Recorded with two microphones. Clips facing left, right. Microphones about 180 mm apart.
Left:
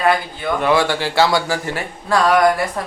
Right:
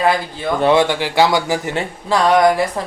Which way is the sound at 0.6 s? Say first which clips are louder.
Right 3 dB; 20° right (ahead or behind).